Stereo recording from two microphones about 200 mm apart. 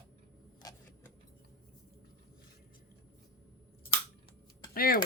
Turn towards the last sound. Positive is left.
turn(degrees=45)  # may be behind; listen again after turning